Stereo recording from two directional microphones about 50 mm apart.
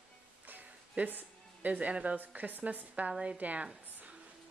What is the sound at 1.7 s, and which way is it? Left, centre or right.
A woman's voice, right.